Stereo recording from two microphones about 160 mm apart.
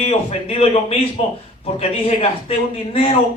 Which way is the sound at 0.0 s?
40° left (ahead or behind).